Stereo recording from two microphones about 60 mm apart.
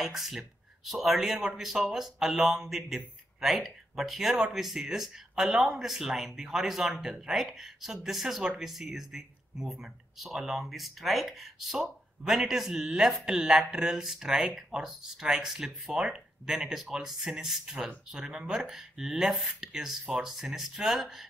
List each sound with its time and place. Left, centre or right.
0.0 s a man's voice: centre